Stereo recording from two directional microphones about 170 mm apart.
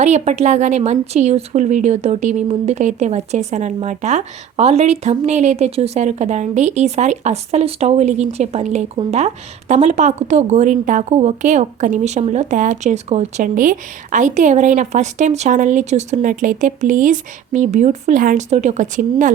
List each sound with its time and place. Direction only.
0.0 s a woman's voice: 40° right (ahead or behind)